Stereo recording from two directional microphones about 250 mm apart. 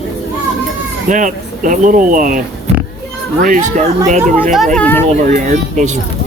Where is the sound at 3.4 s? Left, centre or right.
Right.